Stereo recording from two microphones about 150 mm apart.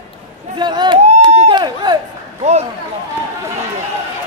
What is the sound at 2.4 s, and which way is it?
Speech, 45° right (ahead or behind).